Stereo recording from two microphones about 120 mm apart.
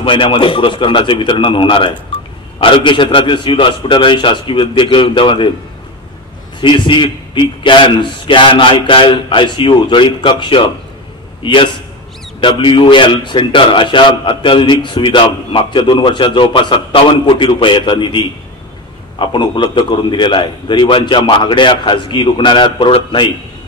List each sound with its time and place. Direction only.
0.0 s a man's voice: 45° left (ahead or behind)
6.6 s a man's voice: 45° left (ahead or behind)